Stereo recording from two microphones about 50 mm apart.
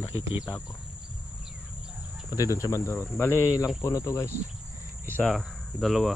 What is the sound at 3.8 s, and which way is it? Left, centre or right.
Speech, left.